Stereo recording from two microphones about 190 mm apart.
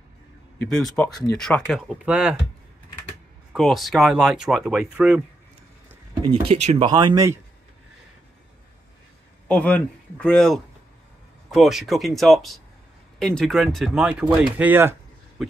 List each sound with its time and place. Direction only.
0.6 s speech: centre (ahead or behind)
3.5 s speech: centre (ahead or behind)
6.2 s speech: 25° right (ahead or behind)
9.5 s speech: 5° left (ahead or behind)
14.6 s a sound: 10° right (ahead or behind)